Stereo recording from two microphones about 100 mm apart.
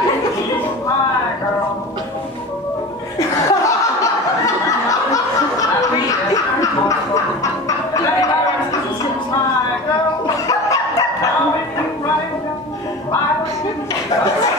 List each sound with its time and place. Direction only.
3.2 s laughter: 35° left (ahead or behind)
10.2 s dog: 35° left (ahead or behind)